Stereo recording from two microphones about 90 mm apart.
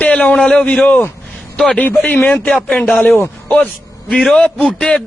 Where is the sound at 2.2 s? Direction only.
20° left (ahead or behind).